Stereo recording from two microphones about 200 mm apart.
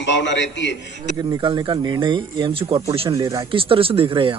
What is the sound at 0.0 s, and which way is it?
Speech, 65° left (ahead or behind).